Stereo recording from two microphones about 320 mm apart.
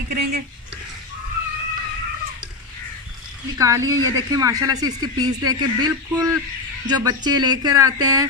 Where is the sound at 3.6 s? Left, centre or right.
Centre.